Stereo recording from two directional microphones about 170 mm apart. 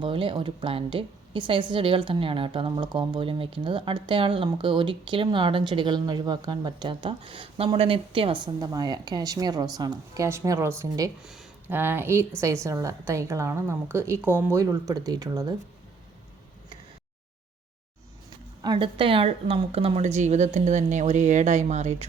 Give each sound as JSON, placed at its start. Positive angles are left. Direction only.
{"t": 0.0, "sound": "a woman's voice", "side_deg": -30}
{"t": 18.6, "sound": "a woman's voice", "side_deg": -30}